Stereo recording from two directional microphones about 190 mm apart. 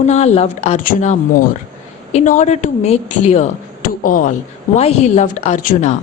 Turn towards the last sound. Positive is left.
turn(degrees=40)  # may be behind; listen again after turning